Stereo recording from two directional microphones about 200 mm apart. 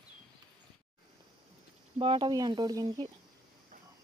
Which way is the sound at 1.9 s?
25° right (ahead or behind).